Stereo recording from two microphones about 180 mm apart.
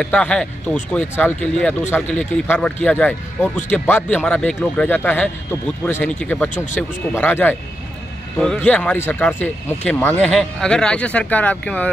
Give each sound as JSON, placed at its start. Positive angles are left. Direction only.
{"t": 0.0, "sound": "speech", "side_deg": 5}